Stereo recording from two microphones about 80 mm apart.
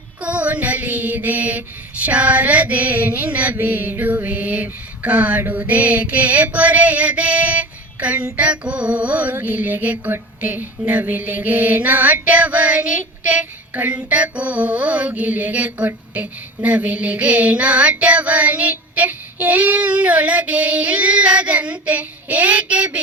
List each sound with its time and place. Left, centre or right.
0.2 s mantra: centre
16.1 s female singing: centre